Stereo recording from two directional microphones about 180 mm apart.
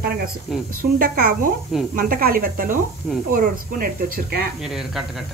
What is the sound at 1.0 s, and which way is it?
Speech, 50° right (ahead or behind).